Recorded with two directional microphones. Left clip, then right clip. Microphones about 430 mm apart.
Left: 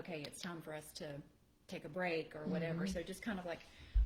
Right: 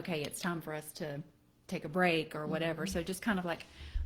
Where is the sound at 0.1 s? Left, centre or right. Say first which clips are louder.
Right 11 dB; right.